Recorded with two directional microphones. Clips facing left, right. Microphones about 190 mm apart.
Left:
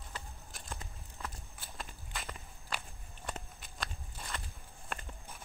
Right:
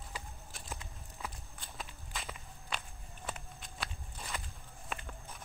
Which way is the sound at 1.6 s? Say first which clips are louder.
Even; centre (ahead or behind).